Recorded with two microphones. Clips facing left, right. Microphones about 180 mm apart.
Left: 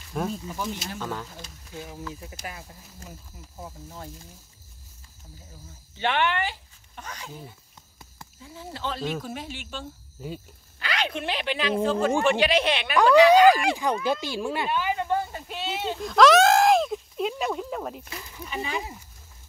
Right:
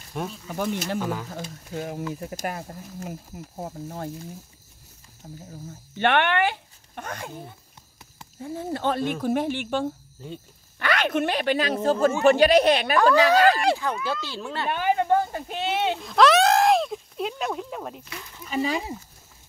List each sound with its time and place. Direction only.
0.1 s speech: centre (ahead or behind)
0.6 s speech: 55° right (ahead or behind)
5.2 s speech: 75° right (ahead or behind)
5.9 s speech: 60° right (ahead or behind); by 12.9 s 40° right (ahead or behind)
13.1 s speech: 15° left (ahead or behind)
14.7 s a sound: 50° right (ahead or behind); by 16.0 s 70° right (ahead or behind)
16.0 s a sound: centre (ahead or behind)
18.5 s speech: 35° right (ahead or behind)